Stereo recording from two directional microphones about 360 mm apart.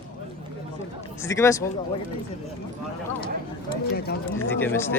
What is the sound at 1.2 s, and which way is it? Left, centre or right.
Speech, centre.